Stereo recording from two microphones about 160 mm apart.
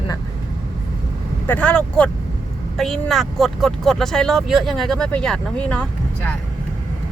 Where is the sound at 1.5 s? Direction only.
10° left (ahead or behind).